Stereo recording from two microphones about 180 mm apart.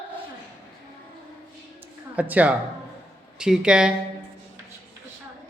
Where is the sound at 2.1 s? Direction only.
10° right (ahead or behind).